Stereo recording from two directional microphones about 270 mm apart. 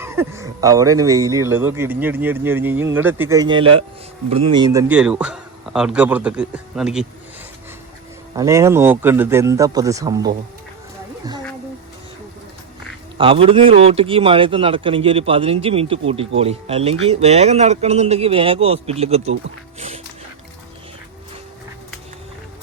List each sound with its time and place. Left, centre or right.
0.0 s a man's voice: centre
8.4 s speech: centre
13.1 s a man's voice: centre